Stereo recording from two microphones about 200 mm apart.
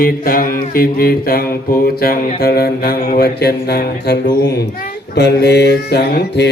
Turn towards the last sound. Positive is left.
turn(degrees=55)  # may be behind; listen again after turning